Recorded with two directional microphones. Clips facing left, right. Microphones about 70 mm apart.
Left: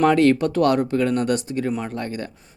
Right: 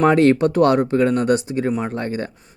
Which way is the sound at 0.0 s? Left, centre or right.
Right.